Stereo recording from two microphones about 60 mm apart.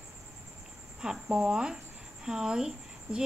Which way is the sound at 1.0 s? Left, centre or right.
Centre.